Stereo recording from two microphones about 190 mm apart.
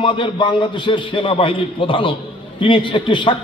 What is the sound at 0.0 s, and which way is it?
A man's voice, 25° left (ahead or behind).